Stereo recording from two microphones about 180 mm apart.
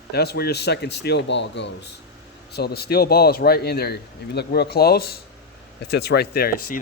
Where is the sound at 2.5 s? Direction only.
60° left (ahead or behind).